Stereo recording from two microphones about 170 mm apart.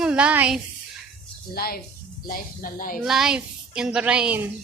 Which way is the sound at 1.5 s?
65° left (ahead or behind).